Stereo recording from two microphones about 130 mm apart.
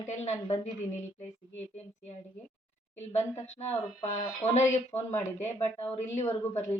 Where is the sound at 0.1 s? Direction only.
60° left (ahead or behind).